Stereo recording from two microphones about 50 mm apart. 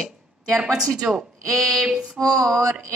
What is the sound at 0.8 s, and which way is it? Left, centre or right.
Speech, centre.